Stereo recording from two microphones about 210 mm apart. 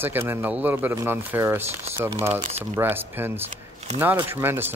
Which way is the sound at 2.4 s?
30° right (ahead or behind).